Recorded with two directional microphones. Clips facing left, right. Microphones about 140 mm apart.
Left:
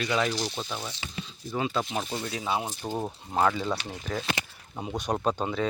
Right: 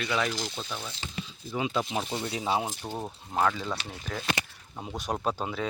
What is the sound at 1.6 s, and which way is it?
Speech, 15° right (ahead or behind).